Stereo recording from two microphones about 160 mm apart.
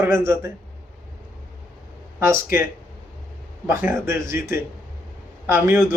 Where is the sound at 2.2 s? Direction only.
15° right (ahead or behind).